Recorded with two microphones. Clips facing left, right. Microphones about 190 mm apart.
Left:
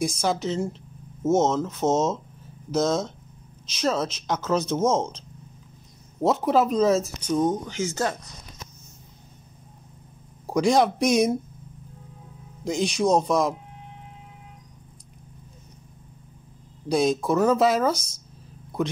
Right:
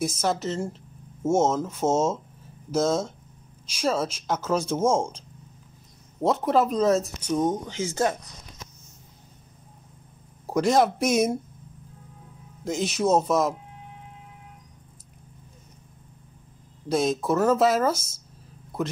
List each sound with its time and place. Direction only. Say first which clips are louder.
0.0 s speech: left 1 dB; 5° right (ahead or behind)
6.2 s speech: left 1 dB; centre (ahead or behind)
7.3 s speech: left 1 dB; 20° right (ahead or behind)
10.4 s speech: left 1 dB; 5° right (ahead or behind)
12.6 s speech: left 1 dB; 5° right (ahead or behind)
16.9 s speech: left 2 dB; centre (ahead or behind)